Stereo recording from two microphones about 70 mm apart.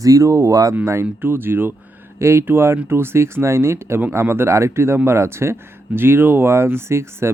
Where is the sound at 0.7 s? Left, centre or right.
Right.